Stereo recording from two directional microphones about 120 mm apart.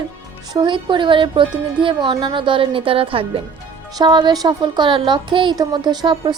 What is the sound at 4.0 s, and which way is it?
A woman's voice, 40° right (ahead or behind).